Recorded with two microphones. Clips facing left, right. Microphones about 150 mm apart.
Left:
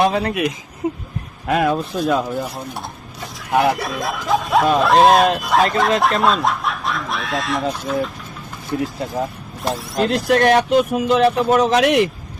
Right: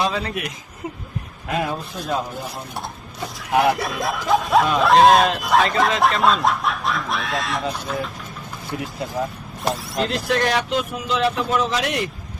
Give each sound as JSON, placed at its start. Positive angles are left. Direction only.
{"t": 0.0, "sound": "speech", "side_deg": 60}
{"t": 1.5, "sound": "speech", "side_deg": 75}
{"t": 3.5, "sound": "speech", "side_deg": 0}
{"t": 9.7, "sound": "speech", "side_deg": 0}
{"t": 10.1, "sound": "speech", "side_deg": 55}